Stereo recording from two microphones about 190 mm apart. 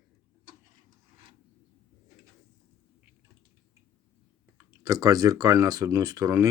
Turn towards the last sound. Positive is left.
turn(degrees=-15)  # may be behind; listen again after turning